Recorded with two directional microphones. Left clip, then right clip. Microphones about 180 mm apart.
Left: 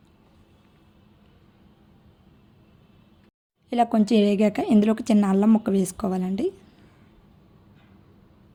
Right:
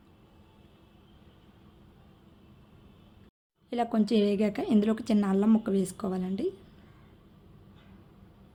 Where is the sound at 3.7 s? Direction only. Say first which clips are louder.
Left 7 dB; 35° left (ahead or behind).